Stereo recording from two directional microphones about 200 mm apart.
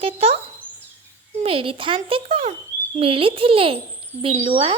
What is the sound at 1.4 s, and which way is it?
Speech, 25° right (ahead or behind).